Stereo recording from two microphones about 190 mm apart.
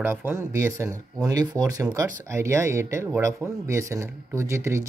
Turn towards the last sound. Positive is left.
turn(degrees=-15)  # may be behind; listen again after turning